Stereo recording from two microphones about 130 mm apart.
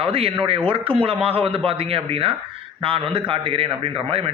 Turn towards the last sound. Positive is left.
turn(degrees=-45)  # may be behind; listen again after turning